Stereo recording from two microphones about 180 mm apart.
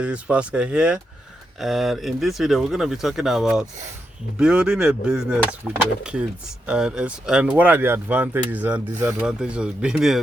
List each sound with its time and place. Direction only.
0.0 s speech: 5° right (ahead or behind)